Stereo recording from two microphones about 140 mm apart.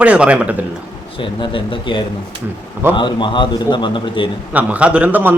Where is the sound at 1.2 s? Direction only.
35° left (ahead or behind).